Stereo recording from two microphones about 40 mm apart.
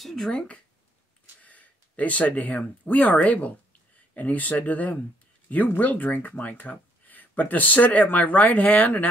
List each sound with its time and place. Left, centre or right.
0.3 s speech: left
1.4 s speech: left